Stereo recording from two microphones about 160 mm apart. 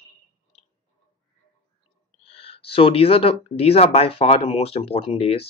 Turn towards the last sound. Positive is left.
turn(degrees=40)  # may be behind; listen again after turning